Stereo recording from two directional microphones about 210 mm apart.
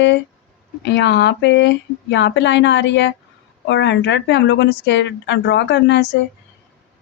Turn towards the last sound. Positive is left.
turn(degrees=55)  # may be behind; listen again after turning